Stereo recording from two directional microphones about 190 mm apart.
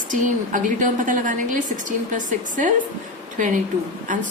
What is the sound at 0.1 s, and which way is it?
A woman's voice, 45° right (ahead or behind).